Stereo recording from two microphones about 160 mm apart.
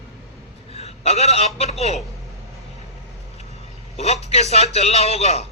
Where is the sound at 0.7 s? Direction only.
40° left (ahead or behind).